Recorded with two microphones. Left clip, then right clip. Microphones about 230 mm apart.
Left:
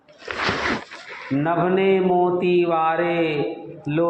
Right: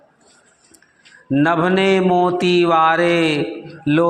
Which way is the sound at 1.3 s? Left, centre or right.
Right.